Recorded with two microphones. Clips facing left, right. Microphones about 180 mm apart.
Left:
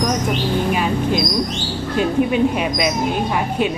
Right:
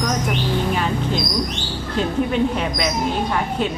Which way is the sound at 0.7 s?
15° left (ahead or behind).